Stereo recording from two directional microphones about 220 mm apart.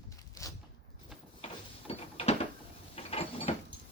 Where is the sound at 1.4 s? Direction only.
25° left (ahead or behind).